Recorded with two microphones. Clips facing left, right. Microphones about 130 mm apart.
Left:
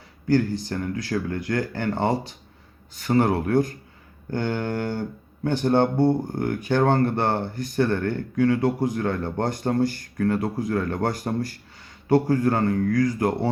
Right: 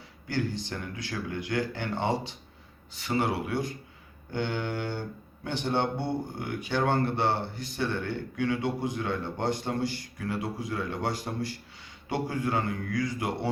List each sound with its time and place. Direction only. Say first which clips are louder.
0.3 s speech: left 9 dB; 40° left (ahead or behind)